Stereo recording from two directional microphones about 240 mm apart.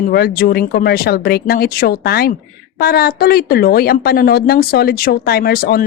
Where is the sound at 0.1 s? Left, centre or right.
Left.